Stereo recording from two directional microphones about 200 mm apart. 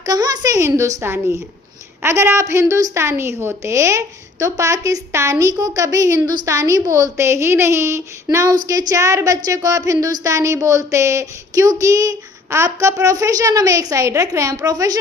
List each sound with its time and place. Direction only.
0.0 s a woman's voice: 20° right (ahead or behind)